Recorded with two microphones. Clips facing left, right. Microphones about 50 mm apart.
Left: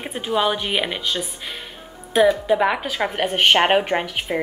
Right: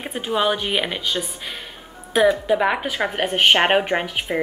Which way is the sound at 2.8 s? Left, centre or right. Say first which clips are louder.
Even; right.